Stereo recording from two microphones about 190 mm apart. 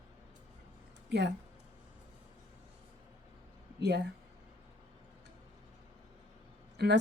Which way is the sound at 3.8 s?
60° right (ahead or behind).